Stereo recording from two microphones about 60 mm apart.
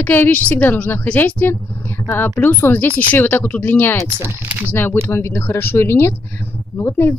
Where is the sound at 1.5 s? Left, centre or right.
Left.